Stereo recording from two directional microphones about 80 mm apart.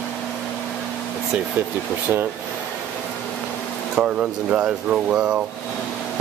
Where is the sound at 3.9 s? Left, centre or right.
Centre.